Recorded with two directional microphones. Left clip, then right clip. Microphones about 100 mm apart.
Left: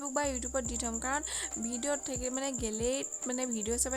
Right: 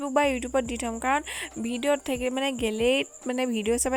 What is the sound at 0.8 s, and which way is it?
Speech, 45° right (ahead or behind).